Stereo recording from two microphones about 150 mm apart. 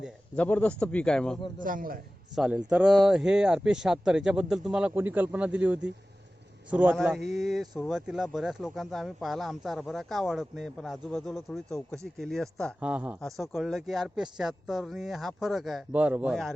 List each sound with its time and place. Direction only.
0.3 s a man's voice: 10° left (ahead or behind)
1.5 s a man's voice: 65° right (ahead or behind)
2.3 s speech: 5° right (ahead or behind)
12.8 s speech: 10° right (ahead or behind)